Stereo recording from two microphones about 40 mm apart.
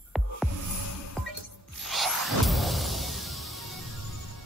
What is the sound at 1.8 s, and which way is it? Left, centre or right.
Music, centre.